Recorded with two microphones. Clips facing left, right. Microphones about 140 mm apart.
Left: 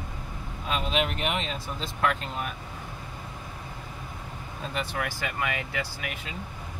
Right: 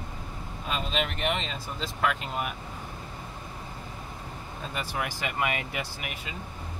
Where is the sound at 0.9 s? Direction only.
5° left (ahead or behind).